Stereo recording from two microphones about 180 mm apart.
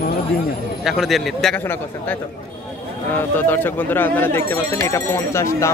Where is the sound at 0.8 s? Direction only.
Centre (ahead or behind).